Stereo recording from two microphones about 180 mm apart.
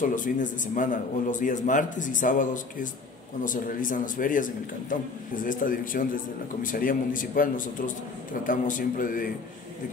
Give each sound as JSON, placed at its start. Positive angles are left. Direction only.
{"t": 0.0, "sound": "a man's voice", "side_deg": 45}